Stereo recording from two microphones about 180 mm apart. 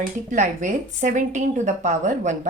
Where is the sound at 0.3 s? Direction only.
40° right (ahead or behind).